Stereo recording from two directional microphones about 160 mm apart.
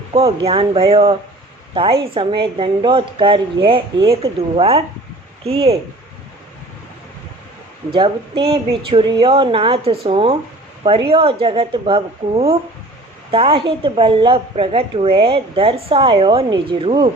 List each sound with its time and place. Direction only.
0.1 s a woman's voice: 35° right (ahead or behind)
7.9 s a woman's voice: 30° right (ahead or behind)